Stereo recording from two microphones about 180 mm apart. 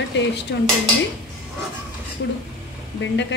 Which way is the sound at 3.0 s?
80° left.